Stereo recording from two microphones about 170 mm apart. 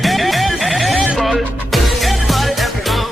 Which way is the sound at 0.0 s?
Centre (ahead or behind).